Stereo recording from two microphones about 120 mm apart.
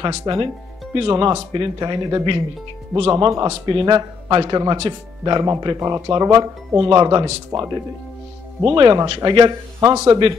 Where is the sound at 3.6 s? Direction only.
40° right (ahead or behind).